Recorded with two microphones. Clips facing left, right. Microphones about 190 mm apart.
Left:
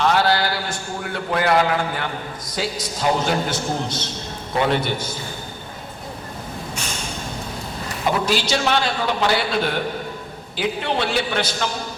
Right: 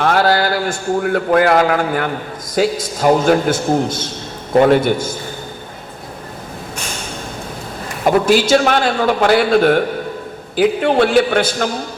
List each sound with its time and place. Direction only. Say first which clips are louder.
0.0 s a man's voice: right 4 dB; 50° right (ahead or behind)
8.0 s a man's voice: right 9 dB; 50° right (ahead or behind)